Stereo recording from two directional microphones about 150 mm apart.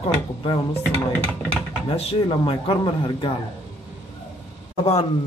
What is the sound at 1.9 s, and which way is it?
Speech, 40° left (ahead or behind).